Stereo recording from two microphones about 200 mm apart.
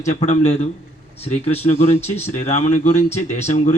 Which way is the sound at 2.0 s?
10° left (ahead or behind).